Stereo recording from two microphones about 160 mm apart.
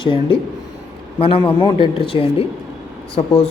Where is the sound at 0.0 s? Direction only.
30° left (ahead or behind).